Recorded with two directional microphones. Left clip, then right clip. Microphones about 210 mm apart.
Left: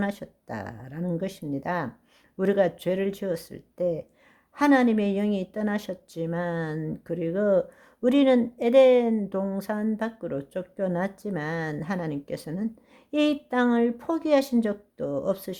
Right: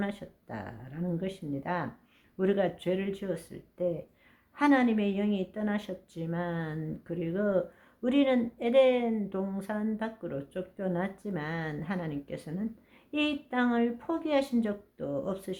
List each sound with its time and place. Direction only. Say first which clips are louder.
0.0 s a woman's voice: left 5 dB; 45° left (ahead or behind)